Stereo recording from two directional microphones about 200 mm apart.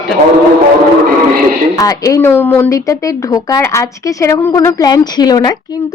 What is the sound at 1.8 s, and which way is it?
Speech, 15° left (ahead or behind).